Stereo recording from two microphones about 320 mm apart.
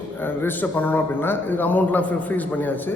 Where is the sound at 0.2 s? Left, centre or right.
Centre.